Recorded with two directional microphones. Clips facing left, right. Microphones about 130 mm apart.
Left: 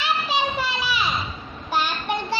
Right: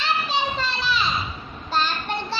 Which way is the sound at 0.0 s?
10° left (ahead or behind).